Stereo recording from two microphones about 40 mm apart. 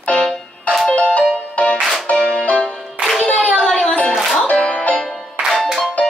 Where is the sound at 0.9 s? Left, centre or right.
Left.